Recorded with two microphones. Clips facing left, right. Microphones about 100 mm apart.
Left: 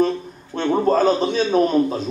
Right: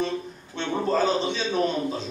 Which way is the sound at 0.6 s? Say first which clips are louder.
Left 7 dB; 45° left (ahead or behind).